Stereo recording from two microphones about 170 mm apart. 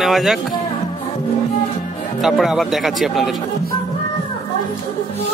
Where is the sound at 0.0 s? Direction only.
Centre (ahead or behind).